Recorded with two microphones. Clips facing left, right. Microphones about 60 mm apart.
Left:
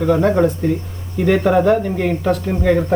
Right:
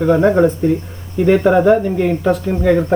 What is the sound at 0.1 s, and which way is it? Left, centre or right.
Speech, right.